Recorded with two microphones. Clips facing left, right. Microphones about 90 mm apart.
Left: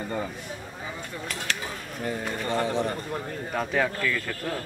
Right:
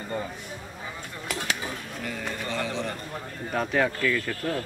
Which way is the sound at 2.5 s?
40° left (ahead or behind).